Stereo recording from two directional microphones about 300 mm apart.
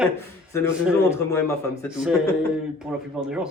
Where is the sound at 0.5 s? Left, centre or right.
Centre.